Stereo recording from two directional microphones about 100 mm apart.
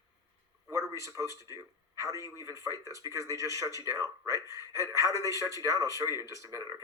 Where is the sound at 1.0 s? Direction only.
30° right (ahead or behind).